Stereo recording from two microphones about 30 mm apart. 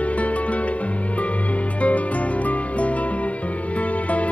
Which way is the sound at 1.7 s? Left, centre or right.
Left.